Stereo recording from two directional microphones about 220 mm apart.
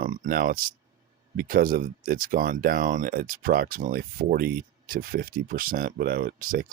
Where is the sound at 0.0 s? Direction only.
35° right (ahead or behind).